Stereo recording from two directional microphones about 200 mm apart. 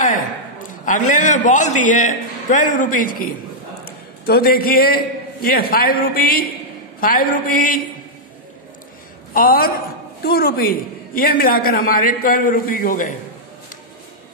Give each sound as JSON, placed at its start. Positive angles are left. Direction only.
{"t": 0.8, "sound": "a man's voice", "side_deg": 40}
{"t": 9.3, "sound": "a man's voice", "side_deg": 45}